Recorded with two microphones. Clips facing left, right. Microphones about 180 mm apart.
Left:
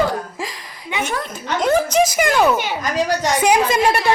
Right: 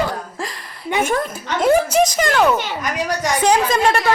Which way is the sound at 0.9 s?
50° right (ahead or behind).